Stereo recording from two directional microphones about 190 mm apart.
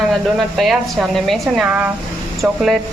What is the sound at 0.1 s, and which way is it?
Speech, centre (ahead or behind).